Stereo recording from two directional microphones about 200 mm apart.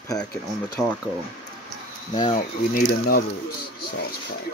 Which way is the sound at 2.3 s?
45° left (ahead or behind).